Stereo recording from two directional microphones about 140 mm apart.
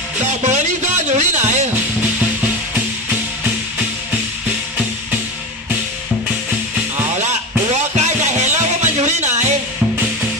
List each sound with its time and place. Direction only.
0.2 s speech: 55° right (ahead or behind)
7.2 s music: 55° right (ahead or behind)